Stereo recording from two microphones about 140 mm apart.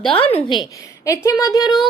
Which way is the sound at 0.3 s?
35° left (ahead or behind).